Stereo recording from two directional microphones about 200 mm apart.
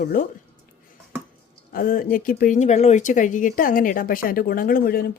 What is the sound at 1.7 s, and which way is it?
Speech, 45° left (ahead or behind).